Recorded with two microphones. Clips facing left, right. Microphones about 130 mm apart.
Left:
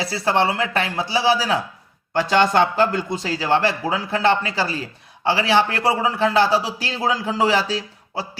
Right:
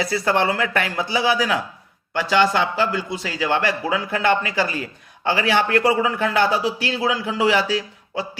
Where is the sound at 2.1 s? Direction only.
40° left (ahead or behind).